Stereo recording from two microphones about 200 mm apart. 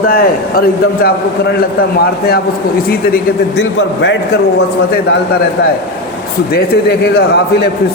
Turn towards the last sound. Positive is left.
turn(degrees=55)  # may be behind; listen again after turning